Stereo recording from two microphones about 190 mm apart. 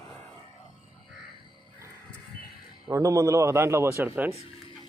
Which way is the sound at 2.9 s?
15° right (ahead or behind).